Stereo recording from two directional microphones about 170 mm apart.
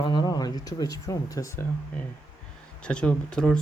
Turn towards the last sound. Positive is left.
turn(degrees=5)  # may be behind; listen again after turning